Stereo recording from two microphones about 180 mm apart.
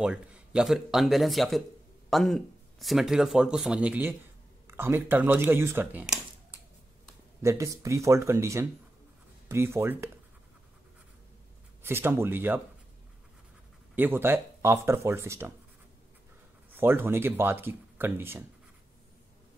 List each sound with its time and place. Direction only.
0.0 s speech: 5° right (ahead or behind)
7.4 s speech: 15° right (ahead or behind)
11.8 s speech: 10° right (ahead or behind)
13.9 s speech: 10° right (ahead or behind)
16.7 s speech: 10° right (ahead or behind)